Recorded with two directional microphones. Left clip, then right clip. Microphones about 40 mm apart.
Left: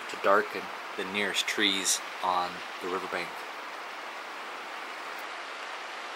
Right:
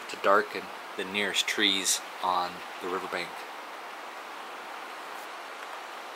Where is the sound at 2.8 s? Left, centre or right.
Left.